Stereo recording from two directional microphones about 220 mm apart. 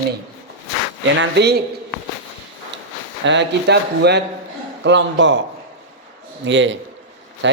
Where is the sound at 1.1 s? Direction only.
50° right (ahead or behind).